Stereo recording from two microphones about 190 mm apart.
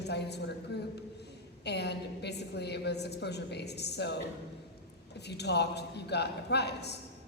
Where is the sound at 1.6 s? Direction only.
60° left (ahead or behind).